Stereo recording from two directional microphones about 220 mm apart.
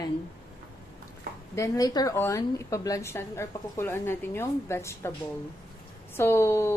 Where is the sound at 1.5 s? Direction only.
15° left (ahead or behind).